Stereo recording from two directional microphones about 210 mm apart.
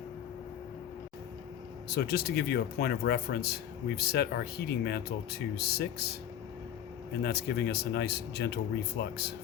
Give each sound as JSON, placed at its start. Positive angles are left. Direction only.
{"t": 1.9, "sound": "speech", "side_deg": 50}
{"t": 7.2, "sound": "speech", "side_deg": 50}